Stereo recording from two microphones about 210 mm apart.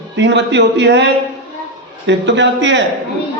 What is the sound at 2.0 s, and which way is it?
Speech, 60° right (ahead or behind).